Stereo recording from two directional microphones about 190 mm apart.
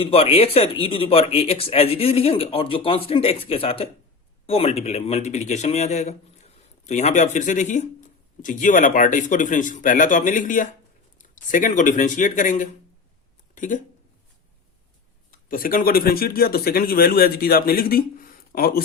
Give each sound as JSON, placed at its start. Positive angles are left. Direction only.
{"t": 0.0, "sound": "a man's voice", "side_deg": 30}
{"t": 15.3, "sound": "a man's voice", "side_deg": 50}